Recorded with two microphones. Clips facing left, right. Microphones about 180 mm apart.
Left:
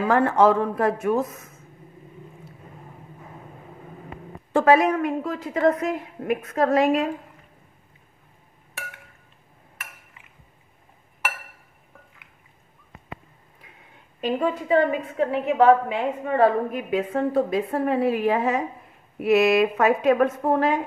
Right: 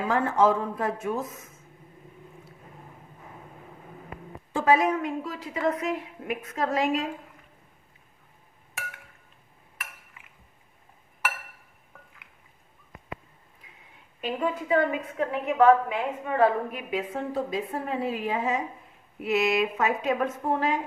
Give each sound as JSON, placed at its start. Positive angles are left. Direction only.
{"t": 0.0, "sound": "speech", "side_deg": 70}
{"t": 4.5, "sound": "a woman's voice", "side_deg": 65}
{"t": 13.6, "sound": "a sound", "side_deg": 65}
{"t": 14.2, "sound": "a woman's voice", "side_deg": 35}
{"t": 16.4, "sound": "a woman's voice", "side_deg": 50}